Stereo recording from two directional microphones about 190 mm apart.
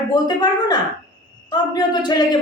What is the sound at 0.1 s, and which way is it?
Speech, 20° left (ahead or behind).